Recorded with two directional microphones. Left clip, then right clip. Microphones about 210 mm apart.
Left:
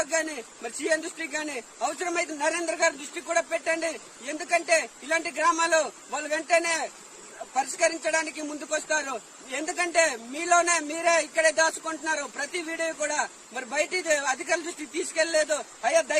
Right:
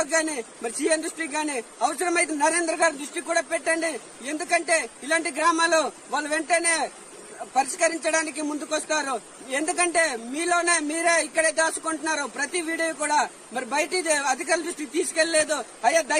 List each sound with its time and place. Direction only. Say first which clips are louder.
0.0 s a man's voice: right 3 dB; 15° left (ahead or behind)